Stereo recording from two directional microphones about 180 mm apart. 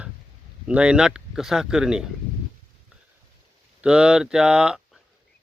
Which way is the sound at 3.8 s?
5° right (ahead or behind).